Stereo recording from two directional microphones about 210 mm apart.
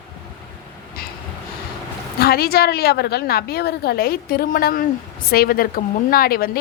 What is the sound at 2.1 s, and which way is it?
A woman's voice, 45° left (ahead or behind).